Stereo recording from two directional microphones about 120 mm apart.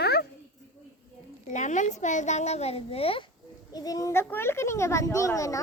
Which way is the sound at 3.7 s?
30° left (ahead or behind).